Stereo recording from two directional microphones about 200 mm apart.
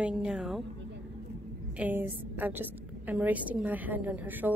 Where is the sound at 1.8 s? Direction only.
10° right (ahead or behind).